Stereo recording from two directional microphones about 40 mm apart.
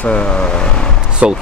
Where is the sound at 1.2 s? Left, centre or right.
Right.